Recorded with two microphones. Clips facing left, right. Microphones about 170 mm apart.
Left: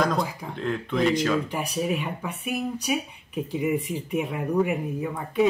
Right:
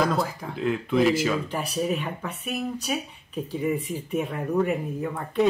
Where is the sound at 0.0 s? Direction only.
5° right (ahead or behind).